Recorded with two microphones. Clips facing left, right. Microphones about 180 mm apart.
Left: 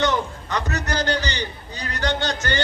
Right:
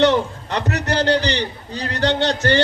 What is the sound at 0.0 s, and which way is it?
A man's voice, 30° right (ahead or behind).